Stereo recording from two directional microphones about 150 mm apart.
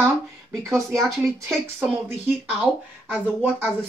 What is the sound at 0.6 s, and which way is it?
Speech, 20° right (ahead or behind).